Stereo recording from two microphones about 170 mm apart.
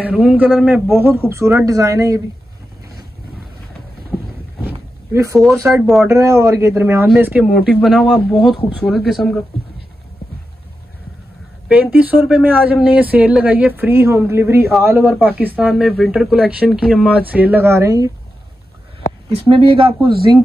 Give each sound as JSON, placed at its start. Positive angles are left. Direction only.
{"t": 0.0, "sound": "speech", "side_deg": -5}
{"t": 0.7, "sound": "speech", "side_deg": -10}
{"t": 4.1, "sound": "a sound", "side_deg": 0}
{"t": 5.1, "sound": "speech", "side_deg": -15}
{"t": 11.7, "sound": "speech", "side_deg": -10}
{"t": 19.3, "sound": "speech", "side_deg": -30}